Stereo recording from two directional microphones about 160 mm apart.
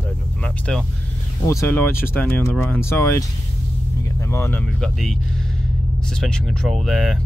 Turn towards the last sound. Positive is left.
turn(degrees=0)  # may be behind; listen again after turning